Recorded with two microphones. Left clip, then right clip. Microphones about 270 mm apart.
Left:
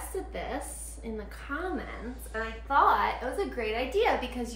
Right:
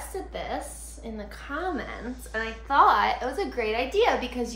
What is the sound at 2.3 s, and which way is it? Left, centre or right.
A woman's voice, right.